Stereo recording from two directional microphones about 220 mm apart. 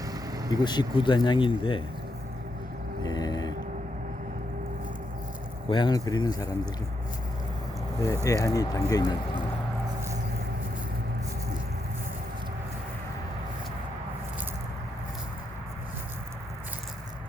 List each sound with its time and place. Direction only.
0.0 s vehicle: 15° right (ahead or behind)
0.5 s speech: 20° left (ahead or behind)
3.0 s a sound: 20° left (ahead or behind)
5.6 s speech: 20° left (ahead or behind)
7.9 s speech: 15° left (ahead or behind)